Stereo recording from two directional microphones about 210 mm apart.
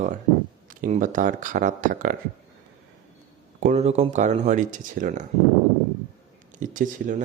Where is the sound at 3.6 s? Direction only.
35° right (ahead or behind).